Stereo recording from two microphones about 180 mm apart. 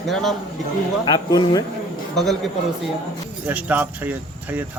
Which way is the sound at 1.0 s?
25° left (ahead or behind).